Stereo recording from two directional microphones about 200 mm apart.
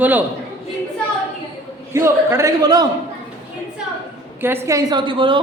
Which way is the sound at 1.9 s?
15° right (ahead or behind).